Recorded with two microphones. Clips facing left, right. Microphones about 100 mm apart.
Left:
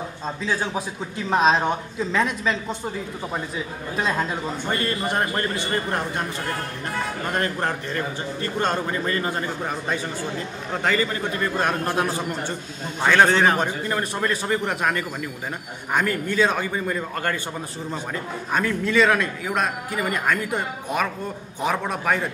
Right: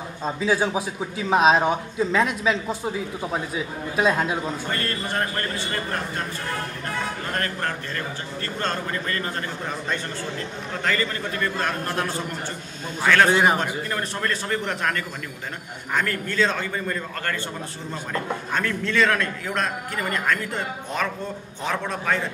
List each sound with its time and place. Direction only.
0.2 s a man's voice: 5° right (ahead or behind)
4.6 s a man's voice: 15° left (ahead or behind)
7.3 s a man's voice: 20° left (ahead or behind)
10.8 s a man's voice: 15° left (ahead or behind)
13.0 s a man's voice: 15° left (ahead or behind)
13.3 s a man's voice: 10° right (ahead or behind)
13.8 s a man's voice: 10° left (ahead or behind)
18.5 s a man's voice: 10° left (ahead or behind)